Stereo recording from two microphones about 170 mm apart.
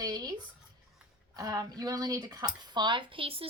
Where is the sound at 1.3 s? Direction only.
20° right (ahead or behind).